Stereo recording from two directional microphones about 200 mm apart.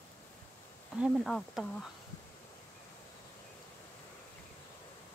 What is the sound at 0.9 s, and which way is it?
Speech, centre (ahead or behind).